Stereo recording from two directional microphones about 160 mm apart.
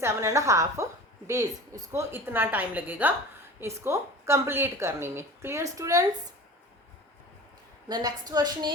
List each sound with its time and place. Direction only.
0.0 s a woman's voice: 20° right (ahead or behind)
7.9 s a woman's voice: 25° right (ahead or behind)